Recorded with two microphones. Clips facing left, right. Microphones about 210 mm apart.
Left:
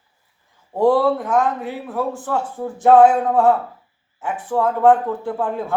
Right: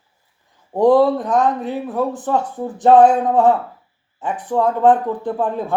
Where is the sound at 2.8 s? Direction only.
20° right (ahead or behind).